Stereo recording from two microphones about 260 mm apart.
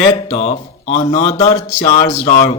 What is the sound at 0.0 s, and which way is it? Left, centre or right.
Speech, left.